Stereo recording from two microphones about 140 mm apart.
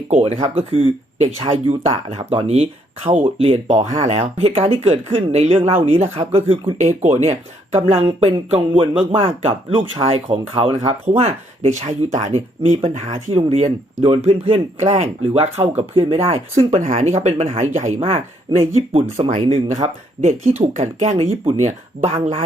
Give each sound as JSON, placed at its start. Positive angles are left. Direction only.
{"t": 0.4, "sound": "speech", "side_deg": -45}
{"t": 11.2, "sound": "speech", "side_deg": -50}
{"t": 18.5, "sound": "speech", "side_deg": -30}
{"t": 19.4, "sound": "speech", "side_deg": -45}